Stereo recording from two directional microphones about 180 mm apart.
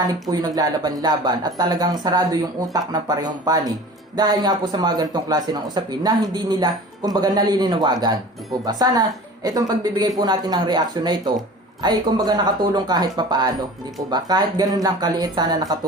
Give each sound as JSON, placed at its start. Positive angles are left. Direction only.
{"t": 0.1, "sound": "a woman's voice", "side_deg": -20}